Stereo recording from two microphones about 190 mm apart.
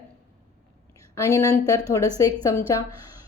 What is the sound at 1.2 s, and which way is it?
A woman's voice, 15° left (ahead or behind).